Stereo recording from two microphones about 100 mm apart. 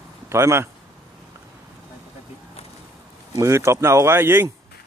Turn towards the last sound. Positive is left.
turn(degrees=-25)  # may be behind; listen again after turning